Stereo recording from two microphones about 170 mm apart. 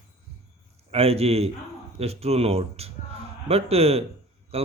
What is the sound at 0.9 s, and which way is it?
A man's voice, 35° right (ahead or behind).